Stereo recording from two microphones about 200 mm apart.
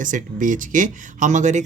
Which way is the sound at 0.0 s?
40° right (ahead or behind).